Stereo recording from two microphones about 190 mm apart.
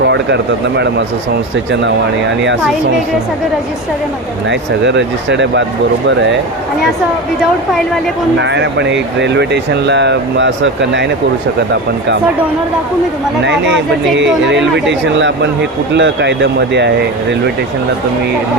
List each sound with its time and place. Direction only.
1.5 s speech: 70° right (ahead or behind)
4.4 s speech: 70° right (ahead or behind)
8.4 s speech: 70° right (ahead or behind)
13.4 s speech: 65° right (ahead or behind)